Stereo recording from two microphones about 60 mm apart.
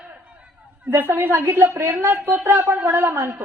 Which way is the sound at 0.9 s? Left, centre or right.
Right.